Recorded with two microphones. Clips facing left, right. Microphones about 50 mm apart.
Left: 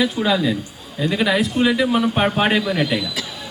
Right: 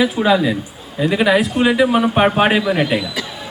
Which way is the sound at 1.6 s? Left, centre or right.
Centre.